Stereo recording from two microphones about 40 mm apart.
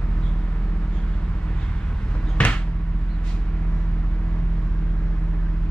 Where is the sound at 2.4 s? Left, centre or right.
Left.